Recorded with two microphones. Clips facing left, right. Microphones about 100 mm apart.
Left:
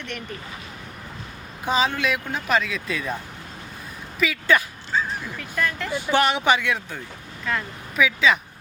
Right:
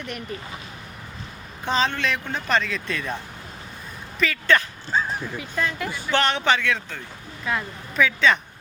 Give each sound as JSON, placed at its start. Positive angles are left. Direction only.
{"t": 1.6, "sound": "speech", "side_deg": 10}
{"t": 4.2, "sound": "speech", "side_deg": 10}
{"t": 4.9, "sound": "bow-wow", "side_deg": -35}
{"t": 5.4, "sound": "speech", "side_deg": -15}
{"t": 6.1, "sound": "speech", "side_deg": 10}
{"t": 7.5, "sound": "speech", "side_deg": -5}
{"t": 7.9, "sound": "speech", "side_deg": 5}